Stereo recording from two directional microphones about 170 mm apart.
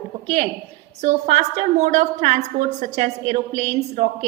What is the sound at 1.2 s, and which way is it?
A woman's voice, 40° right (ahead or behind).